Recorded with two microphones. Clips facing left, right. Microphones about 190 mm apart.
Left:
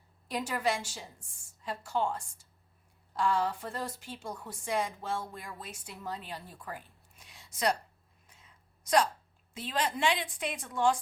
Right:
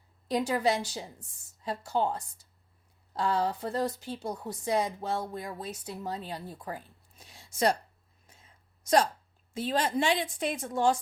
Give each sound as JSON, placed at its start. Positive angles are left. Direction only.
{"t": 0.3, "sound": "a woman's voice", "side_deg": -35}
{"t": 8.3, "sound": "a sound", "side_deg": -45}
{"t": 9.6, "sound": "a woman's voice", "side_deg": -45}